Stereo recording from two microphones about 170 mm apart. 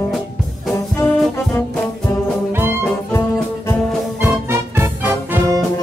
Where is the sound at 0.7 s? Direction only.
15° left (ahead or behind).